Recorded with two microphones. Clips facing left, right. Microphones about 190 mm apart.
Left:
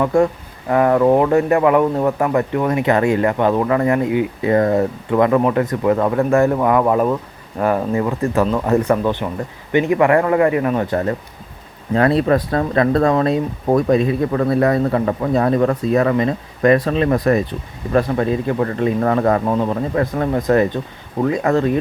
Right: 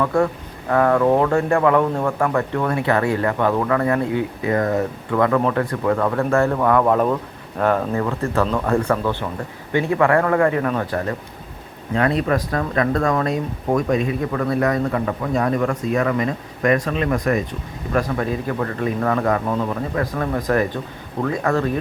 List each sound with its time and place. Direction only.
0.0 s speech: 20° left (ahead or behind)
4.5 s speech: 30° left (ahead or behind)
5.2 s speech: 15° left (ahead or behind)
11.9 s speech: 35° left (ahead or behind)